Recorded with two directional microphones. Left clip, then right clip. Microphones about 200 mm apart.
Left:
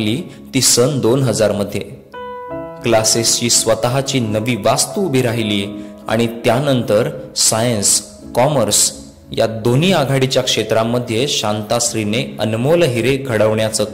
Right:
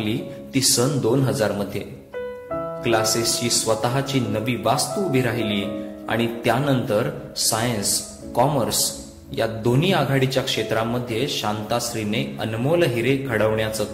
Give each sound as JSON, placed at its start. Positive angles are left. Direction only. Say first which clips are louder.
{"t": 0.0, "sound": "speech", "louder": "left 6 dB", "side_deg": 45}
{"t": 9.3, "sound": "speech", "louder": "left 6 dB", "side_deg": 40}